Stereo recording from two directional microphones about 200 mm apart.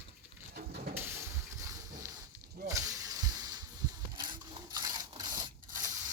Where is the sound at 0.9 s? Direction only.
10° right (ahead or behind).